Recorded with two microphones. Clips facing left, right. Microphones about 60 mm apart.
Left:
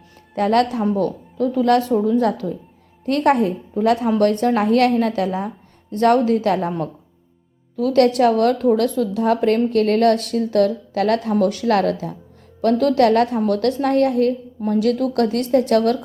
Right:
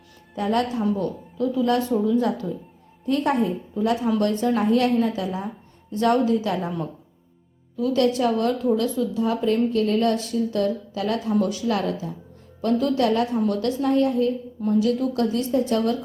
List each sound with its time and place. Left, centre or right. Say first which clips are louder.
0.3 s speech: left 6 dB; left
7.8 s a woman's voice: left 6 dB; left
12.6 s a woman's voice: left 6 dB; left
13.5 s a woman's voice: left 4 dB; left